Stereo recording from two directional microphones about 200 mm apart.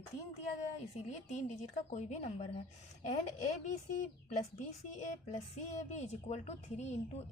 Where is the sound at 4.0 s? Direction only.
35° left (ahead or behind).